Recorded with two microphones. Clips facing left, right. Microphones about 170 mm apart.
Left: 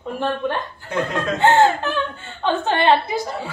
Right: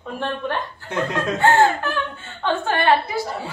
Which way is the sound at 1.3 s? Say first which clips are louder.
Left 2 dB; 20° left (ahead or behind).